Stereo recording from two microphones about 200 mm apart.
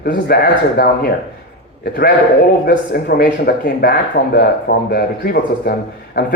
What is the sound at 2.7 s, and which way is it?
Speech, 50° left (ahead or behind).